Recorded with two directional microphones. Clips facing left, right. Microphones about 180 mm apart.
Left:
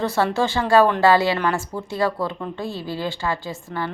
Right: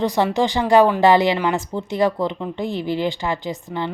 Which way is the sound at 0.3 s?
15° right (ahead or behind).